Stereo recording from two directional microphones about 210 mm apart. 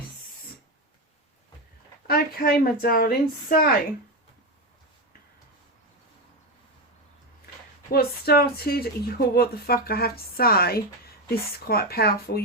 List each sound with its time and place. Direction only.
2.0 s speech: 45° left (ahead or behind)
7.9 s speech: 50° left (ahead or behind)